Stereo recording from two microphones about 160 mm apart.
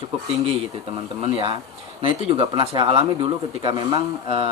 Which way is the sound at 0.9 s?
35° right (ahead or behind).